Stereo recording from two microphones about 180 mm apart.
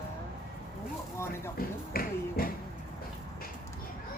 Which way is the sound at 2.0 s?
55° left (ahead or behind).